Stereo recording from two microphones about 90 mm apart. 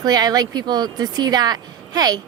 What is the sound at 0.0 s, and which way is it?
A woman's voice, 45° right (ahead or behind).